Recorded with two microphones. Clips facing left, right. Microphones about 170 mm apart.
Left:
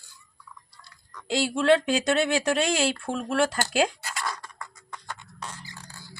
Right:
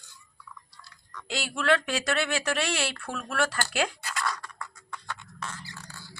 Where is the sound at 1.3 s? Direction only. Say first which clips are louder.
Left 5 dB; 30° left (ahead or behind).